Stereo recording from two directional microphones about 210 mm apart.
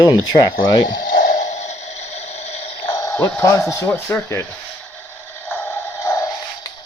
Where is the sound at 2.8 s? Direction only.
15° left (ahead or behind).